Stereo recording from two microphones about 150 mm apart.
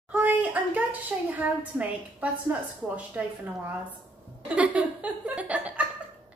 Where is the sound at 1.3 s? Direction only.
10° right (ahead or behind).